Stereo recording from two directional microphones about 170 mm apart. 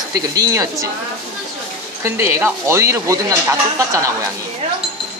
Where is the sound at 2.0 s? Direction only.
15° right (ahead or behind).